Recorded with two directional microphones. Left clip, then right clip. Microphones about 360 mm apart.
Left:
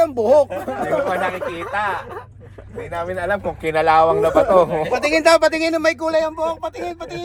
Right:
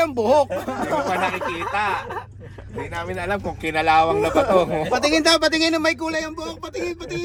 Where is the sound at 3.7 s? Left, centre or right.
Centre.